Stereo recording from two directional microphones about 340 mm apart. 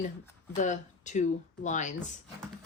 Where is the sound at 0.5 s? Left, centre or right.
Left.